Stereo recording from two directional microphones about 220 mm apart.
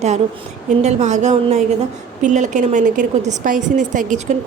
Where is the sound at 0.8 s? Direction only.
30° right (ahead or behind).